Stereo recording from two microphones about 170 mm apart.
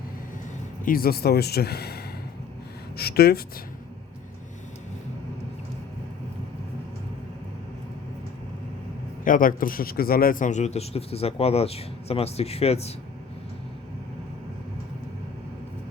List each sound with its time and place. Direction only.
0.9 s speech: 60° left (ahead or behind)
3.0 s speech: 65° left (ahead or behind)
9.2 s a man's voice: 55° left (ahead or behind); by 12.9 s 40° left (ahead or behind)